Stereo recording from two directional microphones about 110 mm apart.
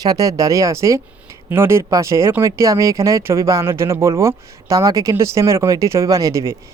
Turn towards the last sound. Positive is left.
turn(degrees=-30)  # may be behind; listen again after turning